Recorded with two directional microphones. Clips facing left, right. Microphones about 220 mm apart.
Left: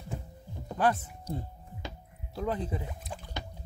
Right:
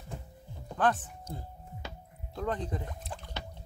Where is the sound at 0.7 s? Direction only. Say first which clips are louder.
Left 1 dB; 10° left (ahead or behind).